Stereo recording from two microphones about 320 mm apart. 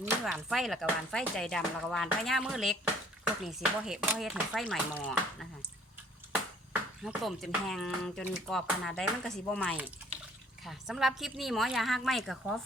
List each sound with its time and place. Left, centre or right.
0.0 s speech: centre
7.0 s speech: centre